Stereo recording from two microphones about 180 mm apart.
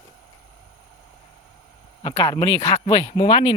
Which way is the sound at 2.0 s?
25° left (ahead or behind).